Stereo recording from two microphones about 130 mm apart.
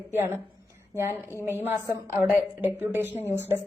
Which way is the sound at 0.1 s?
20° right (ahead or behind).